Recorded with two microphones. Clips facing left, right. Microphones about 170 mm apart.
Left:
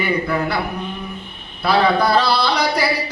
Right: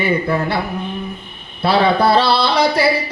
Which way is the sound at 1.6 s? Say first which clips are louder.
Right 2 dB; 30° right (ahead or behind).